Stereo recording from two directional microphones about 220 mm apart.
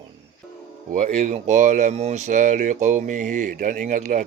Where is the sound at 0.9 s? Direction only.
35° right (ahead or behind).